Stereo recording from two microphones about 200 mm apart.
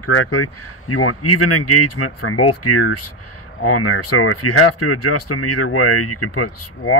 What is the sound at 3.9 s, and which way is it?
Speech, 90° left.